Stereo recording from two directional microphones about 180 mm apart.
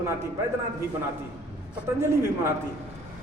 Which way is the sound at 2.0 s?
15° right (ahead or behind).